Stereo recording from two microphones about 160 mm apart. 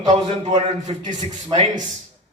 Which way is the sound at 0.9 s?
40° right (ahead or behind).